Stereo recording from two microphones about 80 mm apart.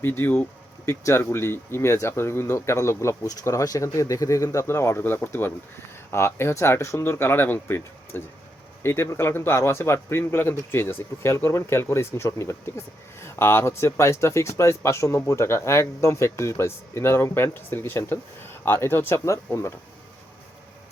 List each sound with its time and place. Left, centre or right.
0.0 s a man's voice: left